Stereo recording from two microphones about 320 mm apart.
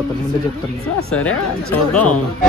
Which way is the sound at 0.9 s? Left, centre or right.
Left.